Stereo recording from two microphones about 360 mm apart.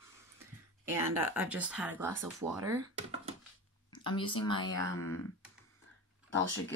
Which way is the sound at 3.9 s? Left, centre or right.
Centre.